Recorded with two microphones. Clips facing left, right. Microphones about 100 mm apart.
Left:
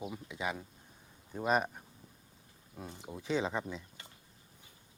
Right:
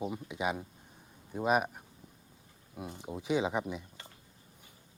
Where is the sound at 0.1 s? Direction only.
20° right (ahead or behind).